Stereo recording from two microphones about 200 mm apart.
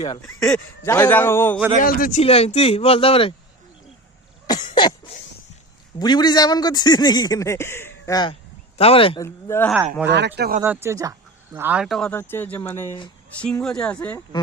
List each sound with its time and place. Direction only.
0.2 s a man's voice: 5° left (ahead or behind)
1.8 s a man's voice: 45° left (ahead or behind); by 3.3 s 30° left (ahead or behind)
4.4 s cough: 20° left (ahead or behind)
6.0 s a man's voice: 20° left (ahead or behind)
9.2 s a man's voice: 10° left (ahead or behind)
10.1 s speech: 60° right (ahead or behind)
10.6 s speech: 10° right (ahead or behind); by 14.2 s 5° left (ahead or behind)